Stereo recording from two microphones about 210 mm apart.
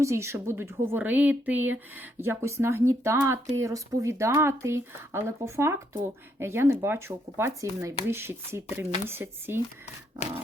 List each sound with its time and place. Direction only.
0.0 s speech: 15° right (ahead or behind)